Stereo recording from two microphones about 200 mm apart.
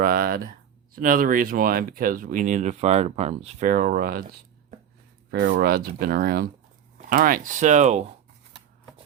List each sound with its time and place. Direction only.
0.0 s speech: 50° right (ahead or behind)